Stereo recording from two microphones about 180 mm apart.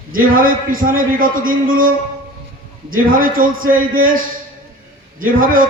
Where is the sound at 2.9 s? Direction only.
50° right (ahead or behind).